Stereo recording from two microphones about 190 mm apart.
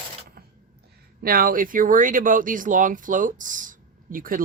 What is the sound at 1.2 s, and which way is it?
Speech, 50° right (ahead or behind).